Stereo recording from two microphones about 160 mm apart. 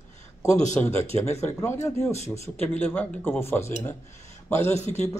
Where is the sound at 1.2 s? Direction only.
45° left (ahead or behind).